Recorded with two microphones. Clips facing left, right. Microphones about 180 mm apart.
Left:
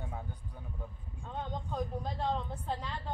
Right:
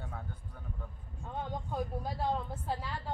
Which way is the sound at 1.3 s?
10° right (ahead or behind).